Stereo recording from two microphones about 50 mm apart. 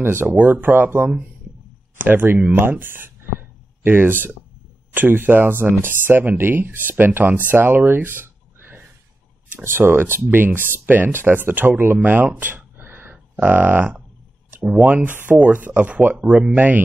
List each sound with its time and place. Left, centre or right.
0.0 s speech: right
16.5 s speech: right